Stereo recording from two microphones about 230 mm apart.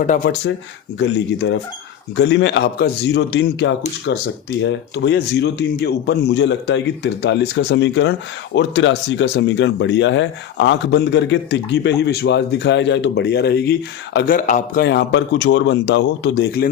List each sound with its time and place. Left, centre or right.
0.2 s speech: left